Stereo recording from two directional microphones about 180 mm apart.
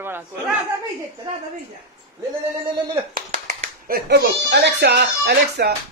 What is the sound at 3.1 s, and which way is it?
A child's voice, 55° right (ahead or behind).